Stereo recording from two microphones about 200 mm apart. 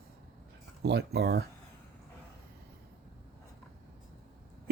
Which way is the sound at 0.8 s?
55° right (ahead or behind).